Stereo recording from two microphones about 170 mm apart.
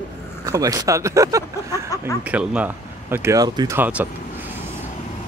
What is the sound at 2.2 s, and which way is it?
Speech, 5° right (ahead or behind).